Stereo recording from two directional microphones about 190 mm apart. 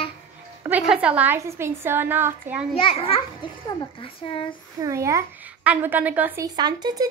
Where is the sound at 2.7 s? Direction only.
30° left (ahead or behind).